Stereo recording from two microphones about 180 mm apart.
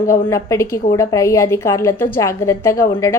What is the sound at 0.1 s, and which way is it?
A woman's voice, 15° left (ahead or behind).